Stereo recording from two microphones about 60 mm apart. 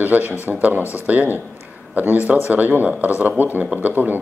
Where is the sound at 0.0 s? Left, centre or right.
Right.